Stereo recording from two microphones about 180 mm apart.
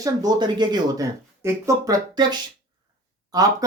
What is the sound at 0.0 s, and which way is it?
Speech, 20° right (ahead or behind).